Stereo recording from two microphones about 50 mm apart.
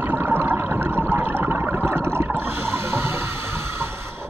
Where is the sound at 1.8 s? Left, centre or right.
Right.